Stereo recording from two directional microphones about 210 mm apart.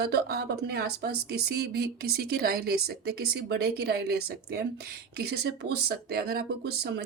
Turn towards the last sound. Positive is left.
turn(degrees=-50)  # may be behind; listen again after turning